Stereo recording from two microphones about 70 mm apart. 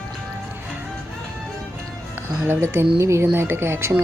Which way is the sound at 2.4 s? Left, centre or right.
Right.